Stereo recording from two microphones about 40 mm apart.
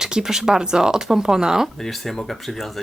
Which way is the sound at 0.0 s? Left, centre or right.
Centre.